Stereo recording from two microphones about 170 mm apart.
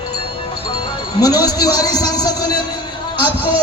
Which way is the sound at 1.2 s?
20° left (ahead or behind).